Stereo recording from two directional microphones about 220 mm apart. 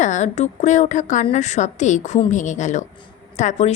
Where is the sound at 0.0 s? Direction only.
35° left (ahead or behind).